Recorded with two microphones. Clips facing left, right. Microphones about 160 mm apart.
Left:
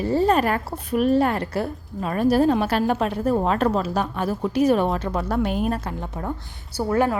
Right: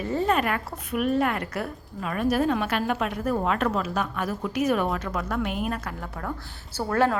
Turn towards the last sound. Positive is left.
turn(degrees=10)  # may be behind; listen again after turning